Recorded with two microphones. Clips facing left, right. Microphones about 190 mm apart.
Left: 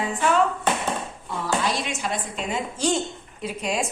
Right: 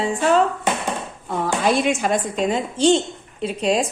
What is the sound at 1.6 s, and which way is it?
A woman's voice, 55° right (ahead or behind).